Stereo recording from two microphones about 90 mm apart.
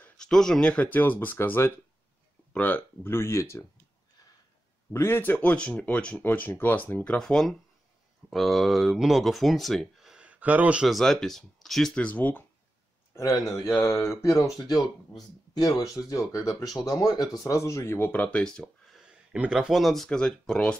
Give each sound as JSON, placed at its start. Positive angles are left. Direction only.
{"t": 0.2, "sound": "speech", "side_deg": 5}
{"t": 4.9, "sound": "speech", "side_deg": 25}
{"t": 7.2, "sound": "speech", "side_deg": 5}
{"t": 10.9, "sound": "speech", "side_deg": 5}
{"t": 13.1, "sound": "a man's voice", "side_deg": 35}
{"t": 18.4, "sound": "a sound", "side_deg": 5}
{"t": 19.0, "sound": "speech", "side_deg": -10}